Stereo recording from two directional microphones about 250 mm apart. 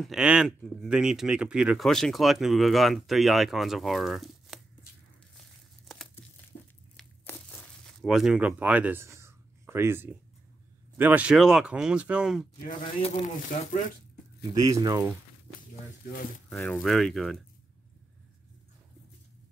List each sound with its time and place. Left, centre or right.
0.0 s speech: centre
5.4 s crumpling: centre
11.0 s speech: centre
12.6 s speech: left
14.6 s speech: centre
16.4 s speech: centre